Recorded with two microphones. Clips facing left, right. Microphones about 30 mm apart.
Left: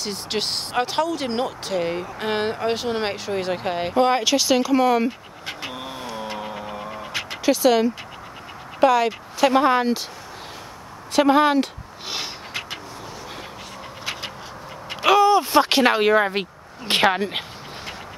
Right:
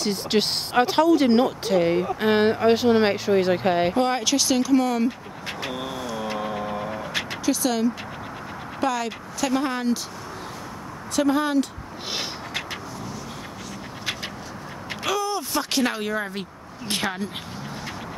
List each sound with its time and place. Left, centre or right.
0.0 s speech: centre
3.9 s speech: centre
5.9 s vehicle: left
6.4 s vehicle: centre
7.4 s speech: left
11.1 s speech: left
15.0 s speech: left